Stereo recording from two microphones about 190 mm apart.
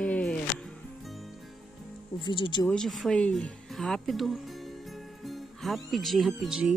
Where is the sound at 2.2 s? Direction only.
25° left (ahead or behind).